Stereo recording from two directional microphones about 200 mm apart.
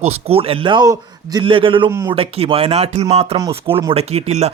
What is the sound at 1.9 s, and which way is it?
Speech, 15° right (ahead or behind).